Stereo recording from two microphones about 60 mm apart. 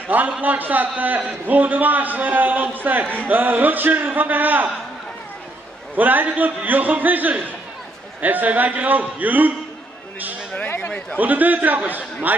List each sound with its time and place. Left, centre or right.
0.4 s a man's voice: right
5.9 s a man's voice: right
10.8 s speech: centre
11.1 s a man's voice: right